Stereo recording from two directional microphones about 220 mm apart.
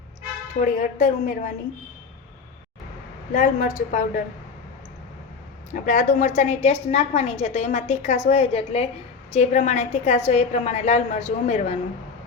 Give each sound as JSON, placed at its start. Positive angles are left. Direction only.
{"t": 0.6, "sound": "a woman's voice", "side_deg": 35}
{"t": 3.3, "sound": "a woman's voice", "side_deg": 35}
{"t": 5.7, "sound": "a woman's voice", "side_deg": 35}